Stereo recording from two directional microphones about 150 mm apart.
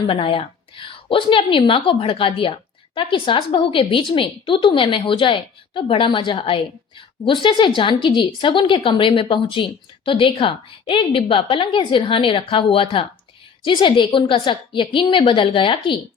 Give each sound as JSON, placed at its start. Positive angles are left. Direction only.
{"t": 0.1, "sound": "a woman's voice", "side_deg": 35}